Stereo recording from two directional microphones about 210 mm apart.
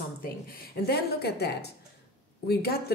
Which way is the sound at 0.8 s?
50° left (ahead or behind).